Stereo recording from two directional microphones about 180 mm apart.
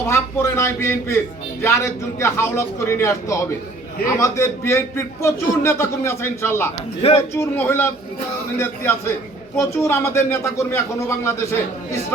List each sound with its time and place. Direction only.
0.0 s a man's voice: 15° left (ahead or behind)
7.0 s a man's voice: 35° left (ahead or behind)
7.3 s a man's voice: 15° left (ahead or behind)